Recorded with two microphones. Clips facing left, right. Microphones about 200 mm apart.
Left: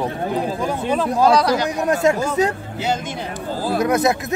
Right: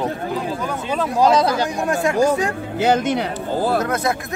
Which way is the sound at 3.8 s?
15° left (ahead or behind).